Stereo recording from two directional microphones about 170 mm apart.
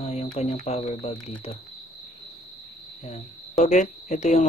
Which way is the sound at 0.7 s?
35° left (ahead or behind).